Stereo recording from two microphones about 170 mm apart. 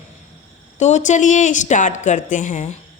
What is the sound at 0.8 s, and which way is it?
A woman's voice, 45° left (ahead or behind).